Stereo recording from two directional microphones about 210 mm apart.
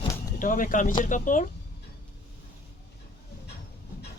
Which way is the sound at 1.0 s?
40° left (ahead or behind).